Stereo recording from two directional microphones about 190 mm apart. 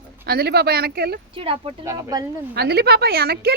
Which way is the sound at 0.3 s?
55° right (ahead or behind).